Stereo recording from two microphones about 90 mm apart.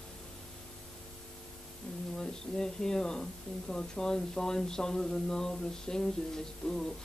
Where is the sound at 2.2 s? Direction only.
5° left (ahead or behind).